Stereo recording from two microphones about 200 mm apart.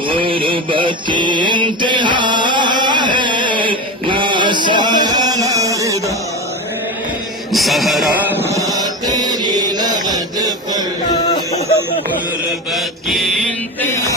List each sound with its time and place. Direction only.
0.1 s mantra: 25° right (ahead or behind)
7.5 s a sound: centre (ahead or behind)
8.4 s mantra: 15° right (ahead or behind)
12.7 s mantra: centre (ahead or behind)